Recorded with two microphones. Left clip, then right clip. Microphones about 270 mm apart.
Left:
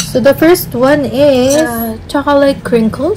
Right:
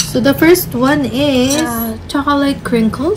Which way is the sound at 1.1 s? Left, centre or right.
Left.